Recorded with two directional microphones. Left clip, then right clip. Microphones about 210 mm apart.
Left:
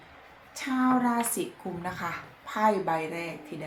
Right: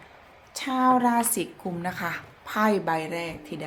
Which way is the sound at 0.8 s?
45° right (ahead or behind).